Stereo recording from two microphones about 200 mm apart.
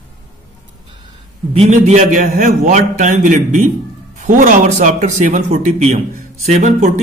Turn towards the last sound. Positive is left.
turn(degrees=-35)  # may be behind; listen again after turning